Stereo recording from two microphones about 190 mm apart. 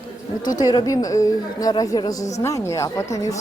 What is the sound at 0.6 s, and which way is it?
A woman's voice, 20° left (ahead or behind).